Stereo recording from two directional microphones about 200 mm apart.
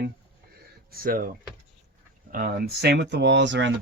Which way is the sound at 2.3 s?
45° right (ahead or behind).